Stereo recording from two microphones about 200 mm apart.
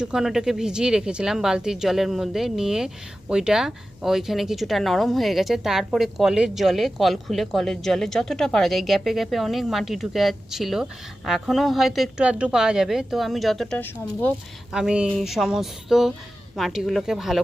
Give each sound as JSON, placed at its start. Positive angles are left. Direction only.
{"t": 0.0, "sound": "speech", "side_deg": -5}
{"t": 14.7, "sound": "speech", "side_deg": -5}